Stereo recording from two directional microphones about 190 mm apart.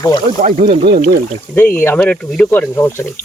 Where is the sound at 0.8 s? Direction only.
55° right (ahead or behind).